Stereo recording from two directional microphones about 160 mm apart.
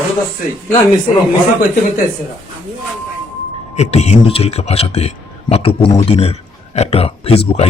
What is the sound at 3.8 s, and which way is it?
A man's voice, 45° left (ahead or behind).